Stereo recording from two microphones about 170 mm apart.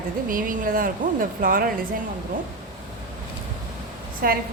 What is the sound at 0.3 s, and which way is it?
Speech, 55° right (ahead or behind).